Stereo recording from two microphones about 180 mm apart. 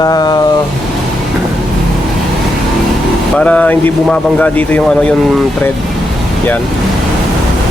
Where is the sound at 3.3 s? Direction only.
5° left (ahead or behind).